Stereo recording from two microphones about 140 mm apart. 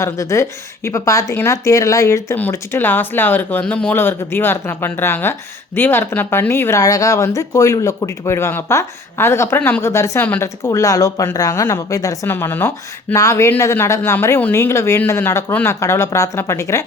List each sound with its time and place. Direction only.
0.0 s speech: 20° left (ahead or behind)